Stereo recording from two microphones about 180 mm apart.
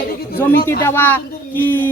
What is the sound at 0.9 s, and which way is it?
Speech, 10° left (ahead or behind).